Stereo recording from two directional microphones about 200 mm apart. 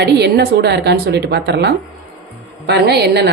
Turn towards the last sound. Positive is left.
turn(degrees=-55)  # may be behind; listen again after turning